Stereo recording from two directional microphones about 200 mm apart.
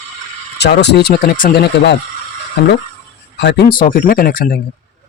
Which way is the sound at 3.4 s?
55° left (ahead or behind).